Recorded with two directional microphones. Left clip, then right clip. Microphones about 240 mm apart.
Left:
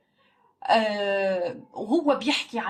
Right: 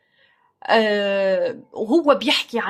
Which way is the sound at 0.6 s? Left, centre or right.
Right.